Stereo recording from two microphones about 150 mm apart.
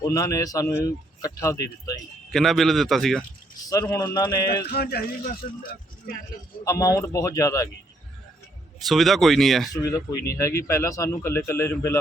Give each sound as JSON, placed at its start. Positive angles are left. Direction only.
{"t": 0.0, "sound": "speech", "side_deg": 20}
{"t": 2.3, "sound": "speech", "side_deg": 0}
{"t": 3.7, "sound": "speech", "side_deg": 25}
{"t": 4.7, "sound": "a man's voice", "side_deg": 90}
{"t": 6.7, "sound": "speech", "side_deg": 20}
{"t": 8.9, "sound": "speech", "side_deg": 0}
{"t": 9.7, "sound": "speech", "side_deg": 20}